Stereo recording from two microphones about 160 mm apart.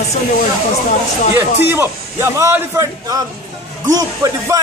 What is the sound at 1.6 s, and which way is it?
A man's voice, 15° right (ahead or behind).